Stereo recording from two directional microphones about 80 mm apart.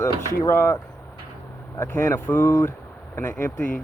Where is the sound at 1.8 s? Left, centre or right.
Left.